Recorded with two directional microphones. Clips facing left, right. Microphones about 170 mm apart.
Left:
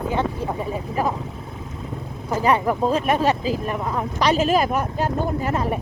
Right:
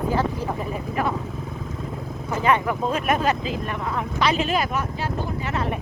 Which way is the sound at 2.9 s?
30° left (ahead or behind).